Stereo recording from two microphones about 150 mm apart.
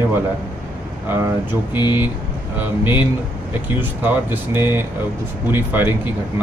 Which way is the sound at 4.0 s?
15° right (ahead or behind).